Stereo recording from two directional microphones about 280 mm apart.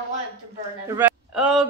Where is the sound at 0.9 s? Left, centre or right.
Centre.